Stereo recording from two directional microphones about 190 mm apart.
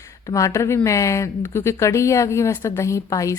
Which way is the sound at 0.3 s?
15° left (ahead or behind).